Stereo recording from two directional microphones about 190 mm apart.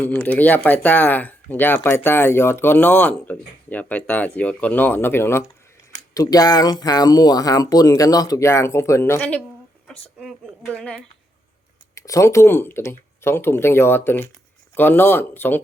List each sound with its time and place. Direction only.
0.0 s speech: 10° left (ahead or behind)
10.2 s a sound: centre (ahead or behind)
11.9 s speech: 15° left (ahead or behind)